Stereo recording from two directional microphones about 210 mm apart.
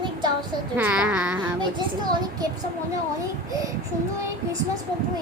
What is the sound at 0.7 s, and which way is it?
Speech, 5° right (ahead or behind).